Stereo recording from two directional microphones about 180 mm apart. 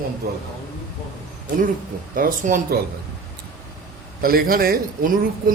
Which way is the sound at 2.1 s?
50° right (ahead or behind).